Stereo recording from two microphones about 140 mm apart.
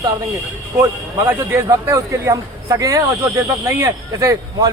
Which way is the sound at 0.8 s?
20° right (ahead or behind).